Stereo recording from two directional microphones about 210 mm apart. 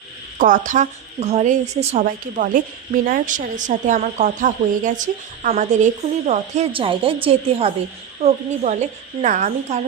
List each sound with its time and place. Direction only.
0.3 s a woman's voice: 40° right (ahead or behind)